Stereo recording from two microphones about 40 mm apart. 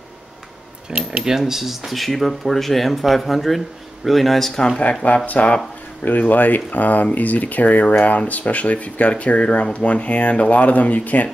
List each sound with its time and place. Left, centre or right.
0.8 s speech: centre
4.6 s speech: left
5.0 s speech: left